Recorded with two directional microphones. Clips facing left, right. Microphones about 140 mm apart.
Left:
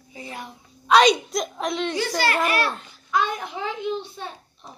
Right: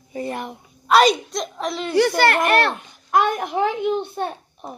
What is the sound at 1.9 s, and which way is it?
A child's voice, 60° right (ahead or behind).